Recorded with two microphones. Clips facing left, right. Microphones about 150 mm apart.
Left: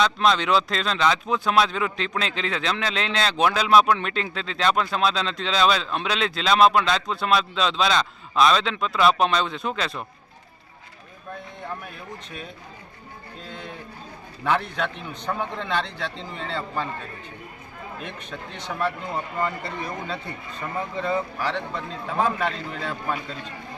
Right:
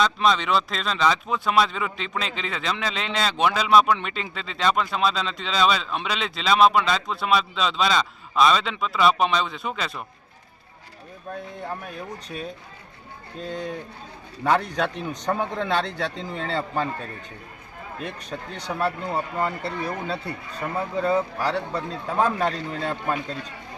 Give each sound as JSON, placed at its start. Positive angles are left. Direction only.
{"t": 0.0, "sound": "speech", "side_deg": 0}
{"t": 13.5, "sound": "a man's voice", "side_deg": -40}
{"t": 18.0, "sound": "speech", "side_deg": -40}